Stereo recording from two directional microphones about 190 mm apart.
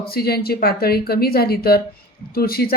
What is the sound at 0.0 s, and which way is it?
A woman's voice, 55° left (ahead or behind).